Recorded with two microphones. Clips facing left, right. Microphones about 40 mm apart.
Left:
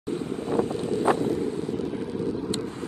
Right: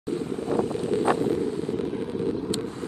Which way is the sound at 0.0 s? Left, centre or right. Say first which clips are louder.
Right 1 dB; left.